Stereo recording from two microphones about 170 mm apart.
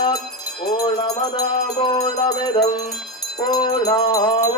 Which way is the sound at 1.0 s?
25° left (ahead or behind).